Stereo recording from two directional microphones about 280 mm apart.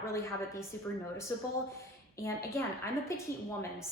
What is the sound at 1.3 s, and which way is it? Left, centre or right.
A woman's voice, centre.